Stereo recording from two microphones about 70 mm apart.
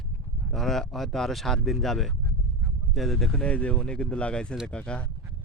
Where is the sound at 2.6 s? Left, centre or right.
Centre.